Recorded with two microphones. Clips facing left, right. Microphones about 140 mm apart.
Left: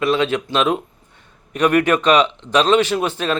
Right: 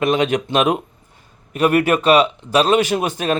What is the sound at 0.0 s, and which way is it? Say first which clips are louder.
Speech: right 1 dB; 15° right (ahead or behind).